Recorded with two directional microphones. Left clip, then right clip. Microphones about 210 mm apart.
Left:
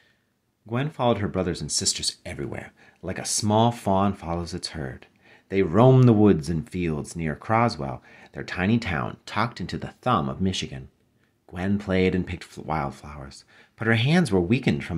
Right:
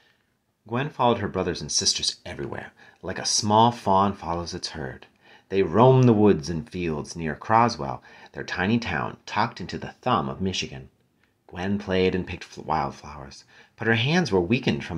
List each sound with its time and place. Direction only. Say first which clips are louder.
0.7 s speech: right 2 dB; 50° left (ahead or behind)